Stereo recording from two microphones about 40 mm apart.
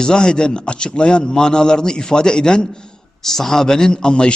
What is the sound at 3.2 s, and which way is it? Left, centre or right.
A man's voice, centre.